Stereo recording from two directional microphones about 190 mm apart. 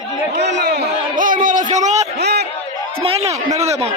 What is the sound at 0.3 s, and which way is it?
Speech, 60° right (ahead or behind).